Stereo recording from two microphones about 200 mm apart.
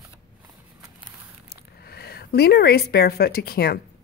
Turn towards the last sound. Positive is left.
turn(degrees=50)  # may be behind; listen again after turning